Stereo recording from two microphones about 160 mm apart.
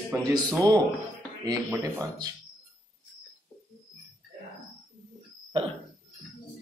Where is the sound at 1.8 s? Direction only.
25° right (ahead or behind).